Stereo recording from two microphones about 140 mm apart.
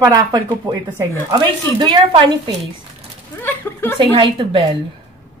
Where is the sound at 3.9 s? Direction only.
35° right (ahead or behind).